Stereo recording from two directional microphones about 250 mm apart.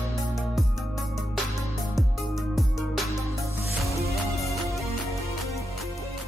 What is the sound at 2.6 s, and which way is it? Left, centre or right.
Music, centre.